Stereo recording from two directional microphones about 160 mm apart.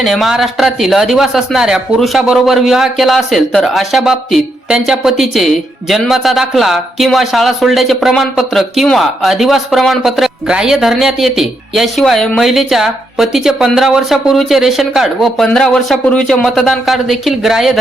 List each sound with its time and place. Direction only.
0.0 s a man's voice: centre (ahead or behind)